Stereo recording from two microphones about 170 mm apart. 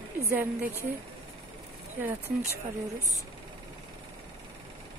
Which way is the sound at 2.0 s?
10° right (ahead or behind).